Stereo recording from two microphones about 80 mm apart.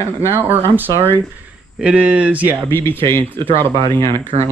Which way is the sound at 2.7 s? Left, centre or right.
Left.